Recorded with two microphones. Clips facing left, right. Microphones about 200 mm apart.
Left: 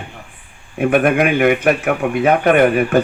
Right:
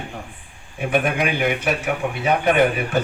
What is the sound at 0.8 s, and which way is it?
A man's voice, 55° left (ahead or behind).